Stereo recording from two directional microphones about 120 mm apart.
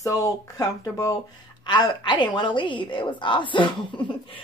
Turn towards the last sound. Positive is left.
turn(degrees=40)  # may be behind; listen again after turning